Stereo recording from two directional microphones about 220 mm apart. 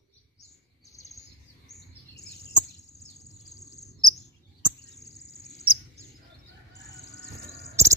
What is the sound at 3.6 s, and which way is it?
Cricket, 15° left (ahead or behind).